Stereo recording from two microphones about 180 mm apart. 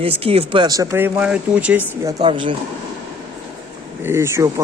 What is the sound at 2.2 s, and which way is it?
Speech, 25° right (ahead or behind).